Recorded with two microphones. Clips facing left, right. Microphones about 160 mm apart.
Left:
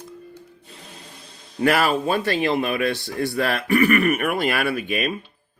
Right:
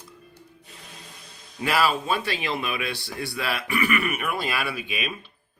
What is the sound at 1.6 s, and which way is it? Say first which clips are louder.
Speech: left 4 dB; 55° left (ahead or behind).